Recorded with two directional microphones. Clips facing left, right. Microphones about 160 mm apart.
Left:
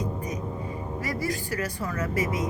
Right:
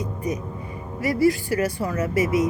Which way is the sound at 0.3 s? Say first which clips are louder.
Right 4 dB; 35° left (ahead or behind).